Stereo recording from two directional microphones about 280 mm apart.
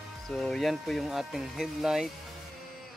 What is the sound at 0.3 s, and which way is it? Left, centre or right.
Speech, centre.